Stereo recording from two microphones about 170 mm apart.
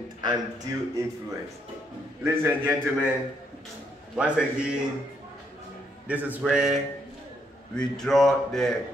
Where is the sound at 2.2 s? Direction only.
15° right (ahead or behind).